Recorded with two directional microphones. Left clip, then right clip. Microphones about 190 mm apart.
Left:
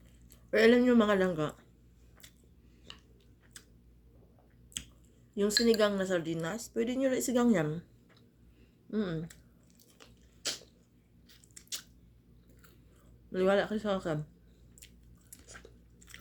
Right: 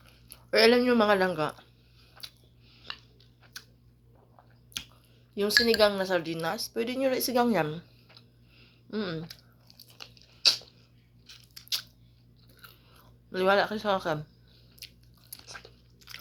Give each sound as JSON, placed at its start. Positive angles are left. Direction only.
{"t": 0.0, "sound": "speech", "side_deg": 20}
{"t": 5.3, "sound": "a woman's voice", "side_deg": 20}
{"t": 9.1, "sound": "speech", "side_deg": -40}
{"t": 11.3, "sound": "a sound", "side_deg": 15}
{"t": 13.3, "sound": "speech", "side_deg": 15}
{"t": 15.5, "sound": "biting", "side_deg": 15}